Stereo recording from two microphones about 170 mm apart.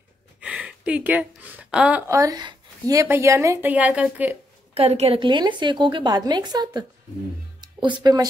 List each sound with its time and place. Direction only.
0.4 s speech: 5° right (ahead or behind)
4.7 s a woman's voice: 35° right (ahead or behind)